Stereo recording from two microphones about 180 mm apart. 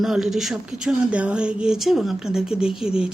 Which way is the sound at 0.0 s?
Centre (ahead or behind).